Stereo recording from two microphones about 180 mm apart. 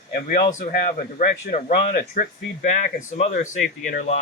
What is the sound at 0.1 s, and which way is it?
Speech, 55° left (ahead or behind).